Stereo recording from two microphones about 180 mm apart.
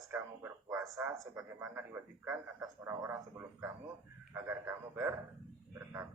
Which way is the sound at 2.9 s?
15° right (ahead or behind).